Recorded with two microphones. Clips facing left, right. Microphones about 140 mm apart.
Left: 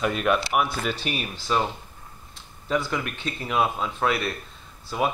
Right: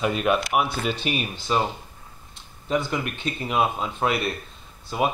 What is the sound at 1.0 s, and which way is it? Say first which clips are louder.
Speech: right 3 dB; 10° right (ahead or behind).